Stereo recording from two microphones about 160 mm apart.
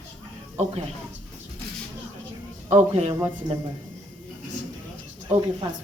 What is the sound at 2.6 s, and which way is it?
Speech, 40° right (ahead or behind).